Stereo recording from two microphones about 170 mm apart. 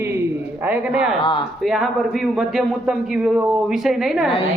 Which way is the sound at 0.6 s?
10° right (ahead or behind).